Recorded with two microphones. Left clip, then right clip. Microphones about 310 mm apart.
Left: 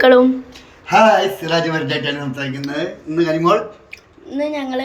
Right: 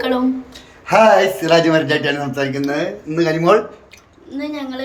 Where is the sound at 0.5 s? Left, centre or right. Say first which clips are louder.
Right 4 dB; centre.